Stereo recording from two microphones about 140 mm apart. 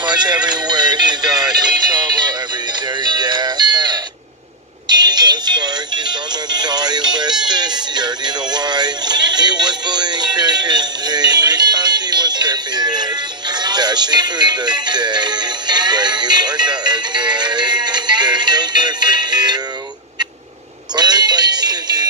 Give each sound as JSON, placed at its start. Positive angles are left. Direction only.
{"t": 0.0, "sound": "music", "side_deg": -30}
{"t": 13.6, "sound": "speech", "side_deg": -30}
{"t": 20.9, "sound": "music", "side_deg": -30}